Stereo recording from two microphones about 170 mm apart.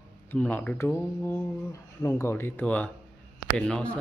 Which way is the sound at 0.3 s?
10° left (ahead or behind).